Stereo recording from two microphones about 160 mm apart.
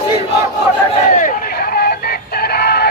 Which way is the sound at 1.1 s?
60° left (ahead or behind).